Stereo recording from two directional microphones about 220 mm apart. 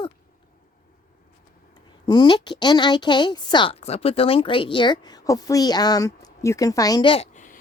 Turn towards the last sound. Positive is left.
turn(degrees=35)  # may be behind; listen again after turning